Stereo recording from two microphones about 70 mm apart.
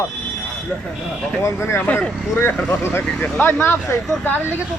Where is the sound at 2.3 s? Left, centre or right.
Left.